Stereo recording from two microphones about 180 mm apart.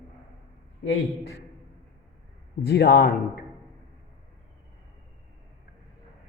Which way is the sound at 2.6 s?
60° left (ahead or behind).